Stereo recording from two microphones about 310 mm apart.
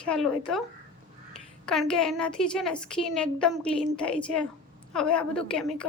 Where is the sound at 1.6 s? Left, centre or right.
Centre.